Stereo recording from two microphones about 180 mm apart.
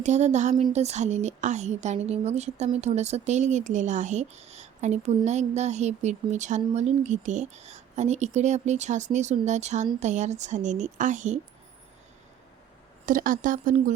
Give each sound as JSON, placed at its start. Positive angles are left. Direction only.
{"t": 0.0, "sound": "speech", "side_deg": -40}
{"t": 13.1, "sound": "speech", "side_deg": -50}